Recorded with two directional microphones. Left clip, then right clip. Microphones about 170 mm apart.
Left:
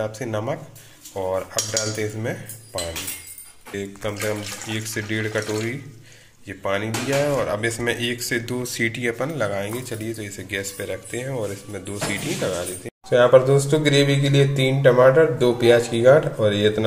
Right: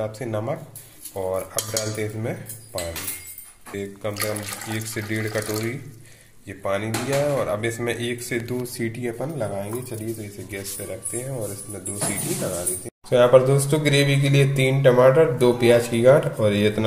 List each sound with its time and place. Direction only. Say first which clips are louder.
0.0 s speech: left 1 dB; centre (ahead or behind)
3.7 s speech: left 1 dB; centre (ahead or behind)
12.8 s speech: left 1 dB; centre (ahead or behind)